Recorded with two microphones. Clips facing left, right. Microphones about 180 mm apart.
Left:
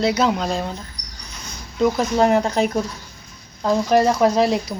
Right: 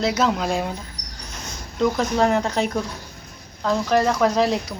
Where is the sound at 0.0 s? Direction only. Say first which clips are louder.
Left 2 dB; centre (ahead or behind).